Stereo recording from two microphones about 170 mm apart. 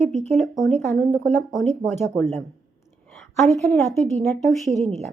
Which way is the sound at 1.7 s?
40° right (ahead or behind).